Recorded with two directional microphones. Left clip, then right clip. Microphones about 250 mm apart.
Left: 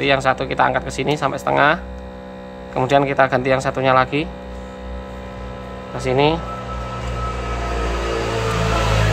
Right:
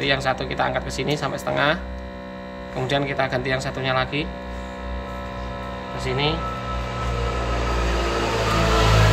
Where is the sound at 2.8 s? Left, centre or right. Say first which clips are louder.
Left 8 dB; centre.